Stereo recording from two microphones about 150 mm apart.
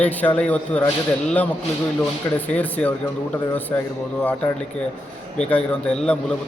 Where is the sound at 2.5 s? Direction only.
10° left (ahead or behind).